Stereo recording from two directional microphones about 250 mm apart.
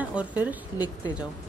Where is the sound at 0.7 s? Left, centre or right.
Centre.